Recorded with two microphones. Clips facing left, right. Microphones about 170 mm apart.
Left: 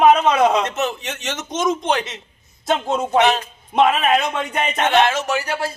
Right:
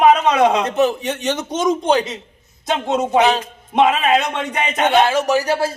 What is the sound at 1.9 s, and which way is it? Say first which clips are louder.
Speech: right 5 dB; 35° right (ahead or behind).